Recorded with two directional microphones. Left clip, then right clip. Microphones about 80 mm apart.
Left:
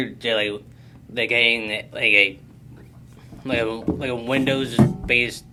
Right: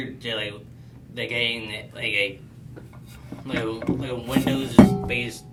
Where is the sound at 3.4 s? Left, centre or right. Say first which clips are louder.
Left 4 dB; left.